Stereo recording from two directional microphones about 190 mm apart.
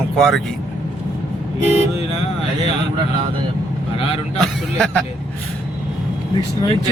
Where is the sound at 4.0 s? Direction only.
30° left (ahead or behind).